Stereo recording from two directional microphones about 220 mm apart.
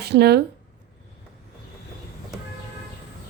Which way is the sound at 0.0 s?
45° right (ahead or behind).